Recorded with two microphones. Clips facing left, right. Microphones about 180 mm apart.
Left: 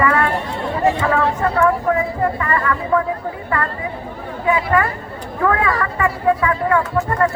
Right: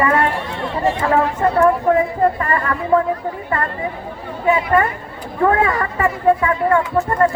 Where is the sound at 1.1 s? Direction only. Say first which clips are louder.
Right 2 dB; 25° right (ahead or behind).